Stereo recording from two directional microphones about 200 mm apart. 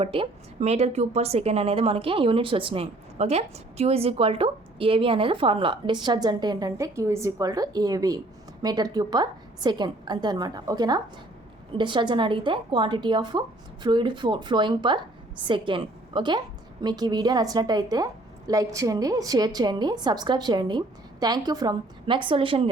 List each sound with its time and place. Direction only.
0.0 s a woman's voice: 30° right (ahead or behind)